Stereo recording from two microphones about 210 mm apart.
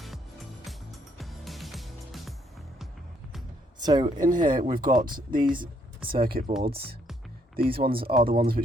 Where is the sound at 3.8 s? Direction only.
20° right (ahead or behind).